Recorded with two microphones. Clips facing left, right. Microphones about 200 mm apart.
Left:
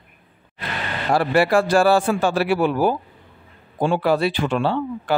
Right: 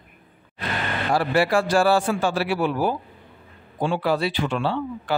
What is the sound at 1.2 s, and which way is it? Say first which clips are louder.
A man's voice: left 3 dB; 55° left (ahead or behind).